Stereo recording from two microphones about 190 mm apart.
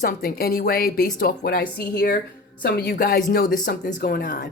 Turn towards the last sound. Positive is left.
turn(degrees=45)  # may be behind; listen again after turning